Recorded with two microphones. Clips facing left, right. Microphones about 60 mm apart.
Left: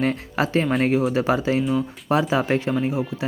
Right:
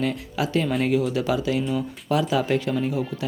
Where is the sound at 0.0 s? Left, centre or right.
Left.